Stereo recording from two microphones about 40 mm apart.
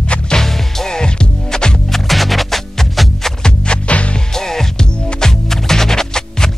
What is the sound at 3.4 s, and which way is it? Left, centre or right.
Music, left.